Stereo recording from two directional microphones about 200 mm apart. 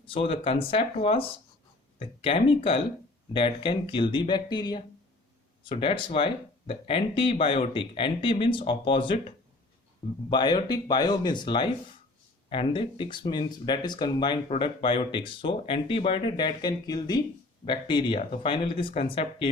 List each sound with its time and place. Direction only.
0.0 s speech: 25° left (ahead or behind)
10.2 s speech: 20° left (ahead or behind)